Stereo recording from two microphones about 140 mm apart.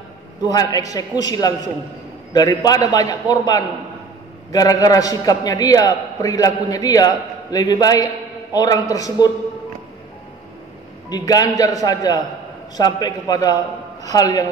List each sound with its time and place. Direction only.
0.5 s a man's voice: 25° left (ahead or behind)
11.1 s a man's voice: 25° left (ahead or behind)